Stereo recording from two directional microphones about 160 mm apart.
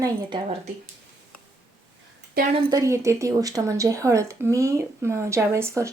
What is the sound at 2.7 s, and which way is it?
Speech, 20° right (ahead or behind).